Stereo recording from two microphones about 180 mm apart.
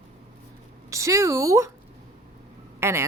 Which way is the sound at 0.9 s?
15° right (ahead or behind).